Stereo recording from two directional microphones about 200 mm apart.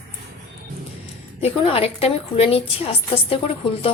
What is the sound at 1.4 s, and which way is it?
Speech, 30° left (ahead or behind).